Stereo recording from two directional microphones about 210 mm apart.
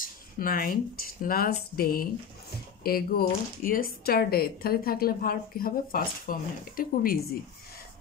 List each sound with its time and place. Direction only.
0.0 s speech: 45° left (ahead or behind)